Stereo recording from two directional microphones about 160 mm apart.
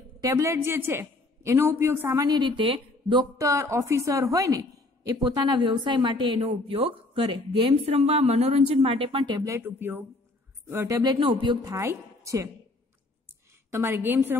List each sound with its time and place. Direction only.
0.2 s a woman's voice: 20° right (ahead or behind)
9.4 s a woman's voice: 15° right (ahead or behind)
13.7 s speech: 15° right (ahead or behind)